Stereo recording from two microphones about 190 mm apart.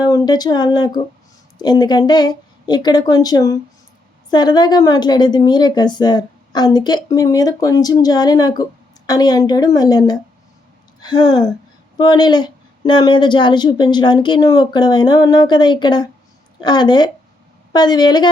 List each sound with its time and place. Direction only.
0.0 s a woman's voice: 20° left (ahead or behind)